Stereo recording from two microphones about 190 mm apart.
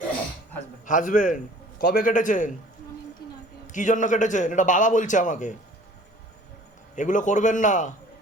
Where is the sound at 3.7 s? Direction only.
40° left (ahead or behind).